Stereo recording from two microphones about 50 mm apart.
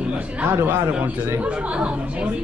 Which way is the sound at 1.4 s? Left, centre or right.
Right.